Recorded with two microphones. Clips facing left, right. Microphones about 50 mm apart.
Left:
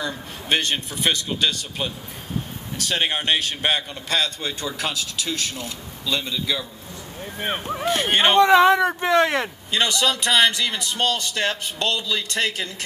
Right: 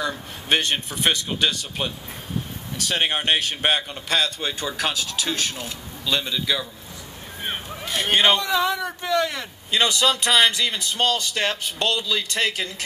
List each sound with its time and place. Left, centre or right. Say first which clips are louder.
0.7 s a man's voice: even; right
2.9 s a man's voice: even; right
7.3 s speech: left 5 dB; left
9.7 s a man's voice: right 2 dB; right
10.7 s speech: right 1 dB; left
11.3 s a man's voice: even; right